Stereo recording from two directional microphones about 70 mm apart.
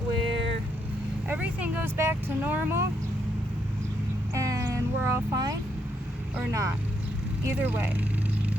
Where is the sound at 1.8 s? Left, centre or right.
Right.